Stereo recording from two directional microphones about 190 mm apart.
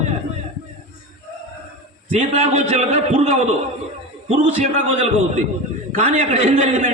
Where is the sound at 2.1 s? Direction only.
35° right (ahead or behind).